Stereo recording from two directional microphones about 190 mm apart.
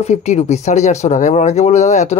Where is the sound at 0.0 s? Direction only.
35° left (ahead or behind).